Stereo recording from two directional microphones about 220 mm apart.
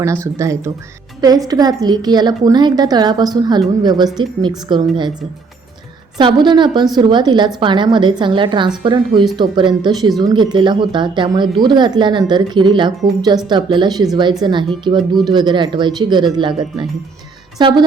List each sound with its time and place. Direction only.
0.0 s speech: 15° right (ahead or behind)
6.1 s speech: 20° right (ahead or behind)